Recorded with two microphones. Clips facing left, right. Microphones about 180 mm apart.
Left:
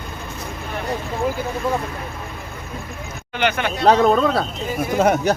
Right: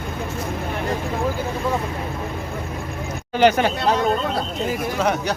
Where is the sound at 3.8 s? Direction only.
80° left.